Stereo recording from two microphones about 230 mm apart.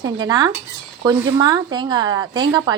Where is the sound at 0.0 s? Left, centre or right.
Centre.